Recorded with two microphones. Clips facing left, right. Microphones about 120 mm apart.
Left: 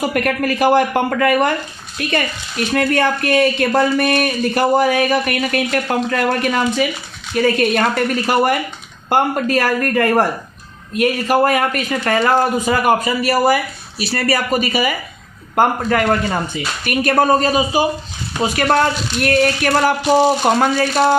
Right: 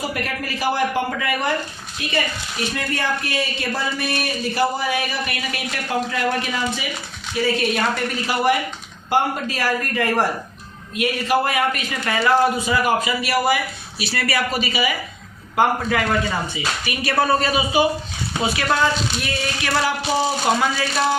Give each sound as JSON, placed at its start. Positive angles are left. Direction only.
{"t": 0.1, "sound": "speech", "side_deg": 60}
{"t": 18.4, "sound": "speech", "side_deg": 50}